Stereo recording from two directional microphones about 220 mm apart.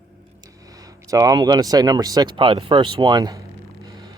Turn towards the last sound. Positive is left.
turn(degrees=-15)  # may be behind; listen again after turning